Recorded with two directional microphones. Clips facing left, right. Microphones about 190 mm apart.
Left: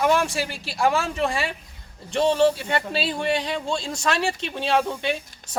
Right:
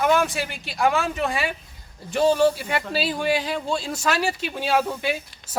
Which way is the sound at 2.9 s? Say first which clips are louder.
Right 4 dB; 5° right (ahead or behind).